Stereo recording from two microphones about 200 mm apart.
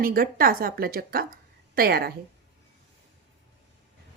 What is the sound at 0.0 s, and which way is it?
A woman's voice, 45° right (ahead or behind).